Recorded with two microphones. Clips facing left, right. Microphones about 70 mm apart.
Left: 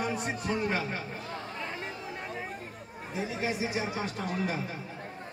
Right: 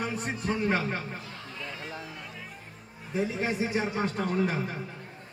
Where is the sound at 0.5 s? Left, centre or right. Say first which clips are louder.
Right 3 dB; right.